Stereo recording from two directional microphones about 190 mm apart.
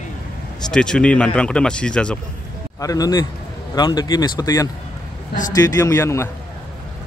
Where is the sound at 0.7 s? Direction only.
5° left (ahead or behind).